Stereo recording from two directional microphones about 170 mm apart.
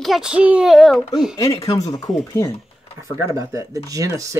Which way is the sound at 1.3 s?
20° left (ahead or behind).